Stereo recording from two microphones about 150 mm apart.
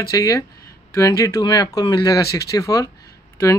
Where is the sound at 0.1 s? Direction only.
20° left (ahead or behind).